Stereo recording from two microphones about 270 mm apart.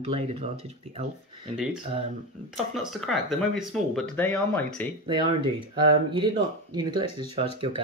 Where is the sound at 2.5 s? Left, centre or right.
Centre.